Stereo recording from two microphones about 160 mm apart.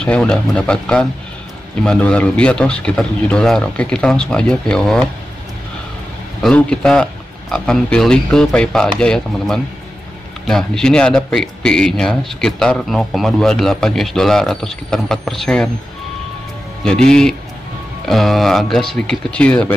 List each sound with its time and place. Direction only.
0.0 s speech: 5° left (ahead or behind)
6.4 s speech: 5° left (ahead or behind)
16.8 s speech: 5° left (ahead or behind)